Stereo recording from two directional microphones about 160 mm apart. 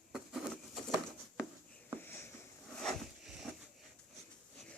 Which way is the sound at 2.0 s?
15° left (ahead or behind).